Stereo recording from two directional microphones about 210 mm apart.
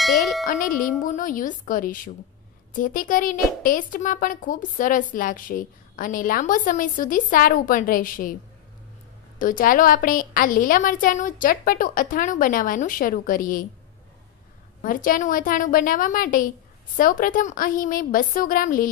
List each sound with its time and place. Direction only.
0.0 s speech: centre (ahead or behind)
0.5 s a woman's voice: 40° left (ahead or behind)
9.4 s a woman's voice: 40° left (ahead or behind)
14.8 s a woman's voice: 40° left (ahead or behind)